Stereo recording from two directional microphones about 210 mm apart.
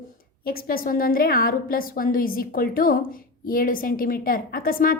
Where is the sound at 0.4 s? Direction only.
45° left (ahead or behind).